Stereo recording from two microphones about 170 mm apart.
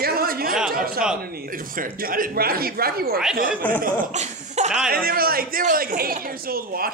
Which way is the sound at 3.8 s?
45° right (ahead or behind).